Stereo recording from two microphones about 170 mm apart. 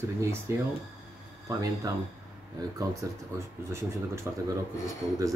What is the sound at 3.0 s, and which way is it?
Speech, 20° right (ahead or behind).